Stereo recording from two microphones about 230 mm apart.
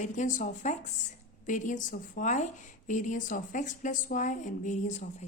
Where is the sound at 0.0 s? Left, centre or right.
Left.